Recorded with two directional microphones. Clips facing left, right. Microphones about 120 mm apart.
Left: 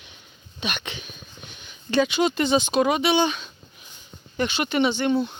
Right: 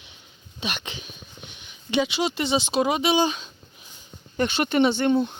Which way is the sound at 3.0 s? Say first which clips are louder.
Even; 35° right (ahead or behind).